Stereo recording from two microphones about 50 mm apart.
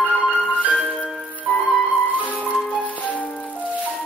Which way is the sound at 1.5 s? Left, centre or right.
Centre.